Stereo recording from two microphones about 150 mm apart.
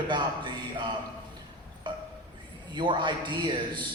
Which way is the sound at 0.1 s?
30° right (ahead or behind).